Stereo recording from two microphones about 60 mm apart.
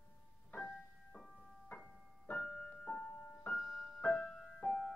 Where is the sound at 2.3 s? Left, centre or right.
Centre.